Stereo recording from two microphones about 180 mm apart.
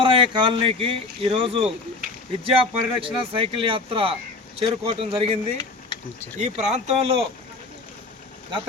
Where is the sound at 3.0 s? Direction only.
30° right (ahead or behind).